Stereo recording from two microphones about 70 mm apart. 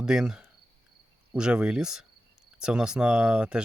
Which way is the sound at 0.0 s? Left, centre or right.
Centre.